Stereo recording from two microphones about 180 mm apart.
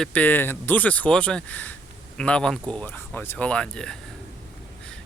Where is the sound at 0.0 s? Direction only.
5° left (ahead or behind).